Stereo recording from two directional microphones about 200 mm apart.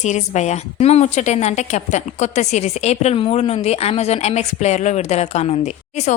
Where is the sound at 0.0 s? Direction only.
35° left (ahead or behind).